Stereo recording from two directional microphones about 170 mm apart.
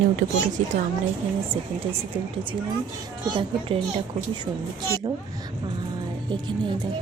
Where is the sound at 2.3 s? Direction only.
30° right (ahead or behind).